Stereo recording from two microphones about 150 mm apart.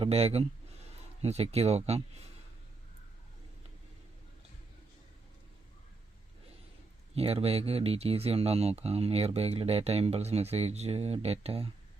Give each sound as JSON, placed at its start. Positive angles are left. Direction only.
{"t": 0.0, "sound": "speech", "side_deg": -40}
{"t": 7.2, "sound": "speech", "side_deg": -40}